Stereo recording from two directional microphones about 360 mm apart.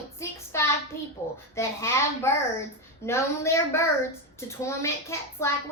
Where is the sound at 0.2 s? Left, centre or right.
Centre.